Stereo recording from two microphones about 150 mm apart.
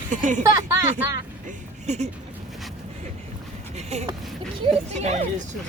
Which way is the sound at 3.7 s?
45° right (ahead or behind).